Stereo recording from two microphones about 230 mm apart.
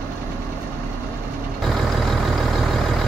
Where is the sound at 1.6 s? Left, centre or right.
Centre.